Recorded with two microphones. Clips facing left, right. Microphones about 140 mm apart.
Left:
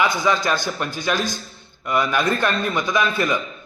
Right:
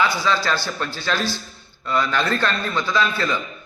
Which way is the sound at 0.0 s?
15° left (ahead or behind).